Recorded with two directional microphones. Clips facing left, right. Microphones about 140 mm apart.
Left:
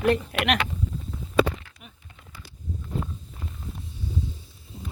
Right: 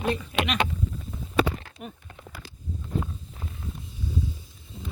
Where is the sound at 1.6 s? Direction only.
45° right (ahead or behind).